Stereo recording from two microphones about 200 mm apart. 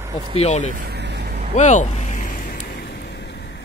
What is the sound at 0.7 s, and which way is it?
Vehicle, 50° right (ahead or behind).